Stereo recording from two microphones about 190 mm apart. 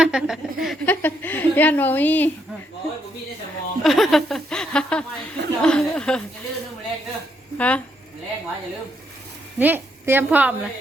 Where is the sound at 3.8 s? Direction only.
Centre (ahead or behind).